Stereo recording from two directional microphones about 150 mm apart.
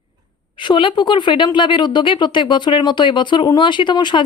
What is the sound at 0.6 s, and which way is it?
Speech, 30° left (ahead or behind).